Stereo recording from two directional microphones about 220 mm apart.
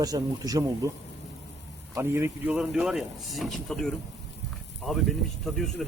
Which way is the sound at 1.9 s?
10° right (ahead or behind).